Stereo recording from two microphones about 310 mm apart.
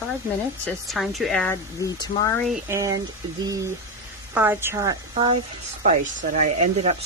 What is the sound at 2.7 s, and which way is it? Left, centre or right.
Speech, centre.